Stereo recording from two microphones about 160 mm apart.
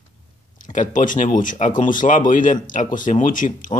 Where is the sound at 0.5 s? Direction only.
55° left (ahead or behind).